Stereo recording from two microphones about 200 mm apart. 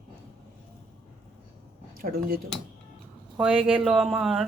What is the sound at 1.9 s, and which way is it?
Speech, 45° right (ahead or behind).